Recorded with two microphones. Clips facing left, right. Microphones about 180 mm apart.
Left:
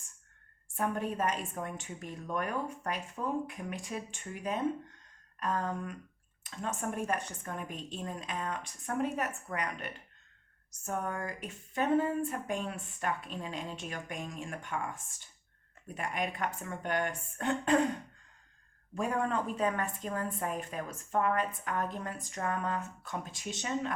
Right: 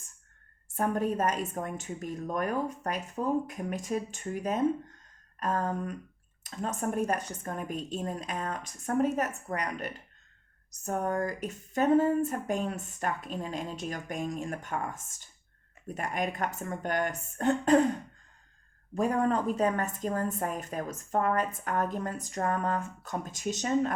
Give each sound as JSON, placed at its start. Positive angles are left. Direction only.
{"t": 0.8, "sound": "speech", "side_deg": -40}
{"t": 18.9, "sound": "speech", "side_deg": -40}